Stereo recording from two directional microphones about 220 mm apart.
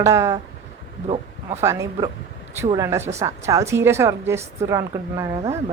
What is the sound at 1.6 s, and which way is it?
A woman's voice, 15° right (ahead or behind).